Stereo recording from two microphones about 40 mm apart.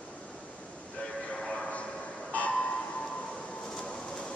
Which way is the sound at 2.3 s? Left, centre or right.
Left.